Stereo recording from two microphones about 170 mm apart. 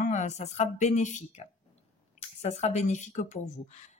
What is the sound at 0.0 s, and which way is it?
Speech, 45° left (ahead or behind).